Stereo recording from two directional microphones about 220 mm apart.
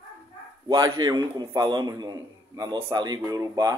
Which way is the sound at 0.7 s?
15° right (ahead or behind).